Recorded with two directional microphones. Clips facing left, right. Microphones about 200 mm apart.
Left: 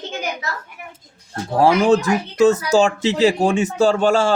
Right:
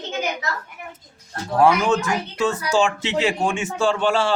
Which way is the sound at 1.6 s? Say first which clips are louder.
Left 3 dB; 35° left (ahead or behind).